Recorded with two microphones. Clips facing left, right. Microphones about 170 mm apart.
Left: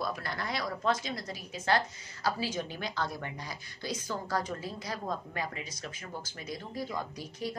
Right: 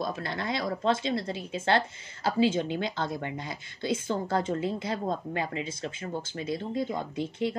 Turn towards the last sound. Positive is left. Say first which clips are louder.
# right 8 dB
turn(degrees=-25)  # may be behind; listen again after turning